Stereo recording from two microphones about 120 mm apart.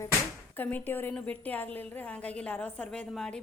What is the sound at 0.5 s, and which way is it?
A woman's voice, 15° left (ahead or behind).